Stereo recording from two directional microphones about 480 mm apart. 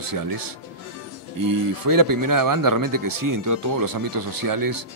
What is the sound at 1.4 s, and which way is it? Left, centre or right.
Speech, right.